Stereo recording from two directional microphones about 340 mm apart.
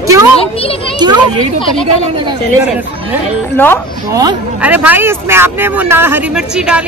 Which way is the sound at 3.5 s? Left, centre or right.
Centre.